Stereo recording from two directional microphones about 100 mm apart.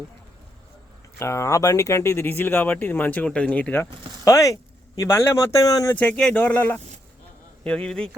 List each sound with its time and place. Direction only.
1.2 s speech: 30° left (ahead or behind)
4.3 s speech: 35° left (ahead or behind)
5.9 s speech: 15° left (ahead or behind)